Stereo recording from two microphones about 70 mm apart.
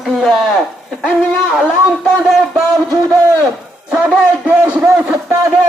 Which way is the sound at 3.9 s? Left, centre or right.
Centre.